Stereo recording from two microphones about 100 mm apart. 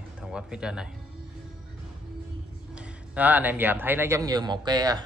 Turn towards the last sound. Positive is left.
turn(degrees=-40)  # may be behind; listen again after turning